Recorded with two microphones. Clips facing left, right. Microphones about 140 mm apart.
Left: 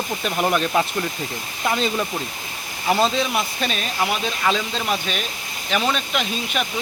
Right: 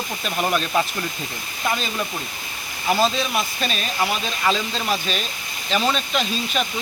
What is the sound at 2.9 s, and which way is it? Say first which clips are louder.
Speech: left 1 dB; 20° left (ahead or behind).